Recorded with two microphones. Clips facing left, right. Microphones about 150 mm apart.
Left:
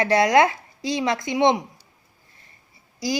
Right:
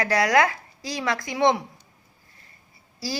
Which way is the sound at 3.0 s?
20° left (ahead or behind).